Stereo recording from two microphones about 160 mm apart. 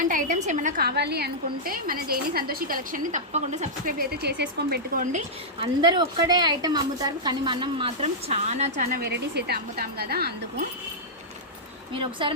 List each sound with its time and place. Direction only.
0.1 s a woman's voice: 50° right (ahead or behind)
0.8 s a woman's voice: 85° right
5.1 s a woman's voice: 30° right (ahead or behind)
9.0 s a woman's voice: 90° right